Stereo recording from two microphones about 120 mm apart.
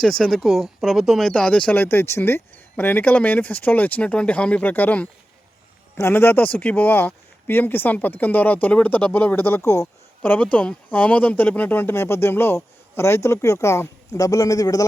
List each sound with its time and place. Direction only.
0.0 s speech: 5° left (ahead or behind); by 14.8 s 30° left (ahead or behind)